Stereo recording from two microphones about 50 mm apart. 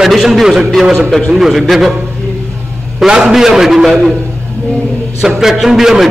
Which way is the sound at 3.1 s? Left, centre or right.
Centre.